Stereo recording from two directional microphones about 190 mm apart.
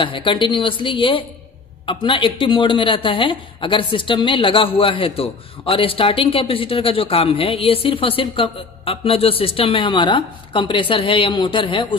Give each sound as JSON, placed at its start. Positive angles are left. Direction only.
{"t": 0.0, "sound": "speech", "side_deg": 25}